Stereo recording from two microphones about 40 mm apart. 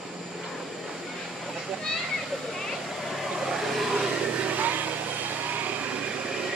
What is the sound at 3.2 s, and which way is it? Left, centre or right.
Vehicle, centre.